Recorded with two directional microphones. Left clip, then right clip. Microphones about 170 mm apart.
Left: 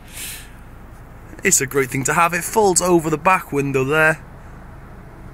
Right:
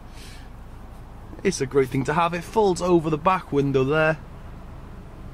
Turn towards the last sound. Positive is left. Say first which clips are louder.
# left 4 dB
turn(degrees=0)  # may be behind; listen again after turning